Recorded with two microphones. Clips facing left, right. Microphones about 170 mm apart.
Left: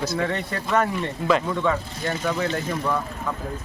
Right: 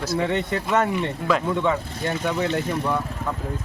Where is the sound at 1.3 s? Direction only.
Centre (ahead or behind).